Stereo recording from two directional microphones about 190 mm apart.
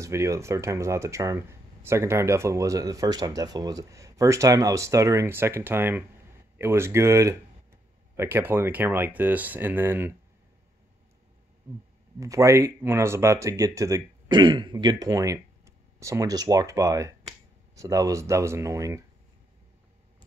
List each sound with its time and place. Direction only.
0.0 s speech: 15° right (ahead or behind)
12.2 s speech: 15° right (ahead or behind)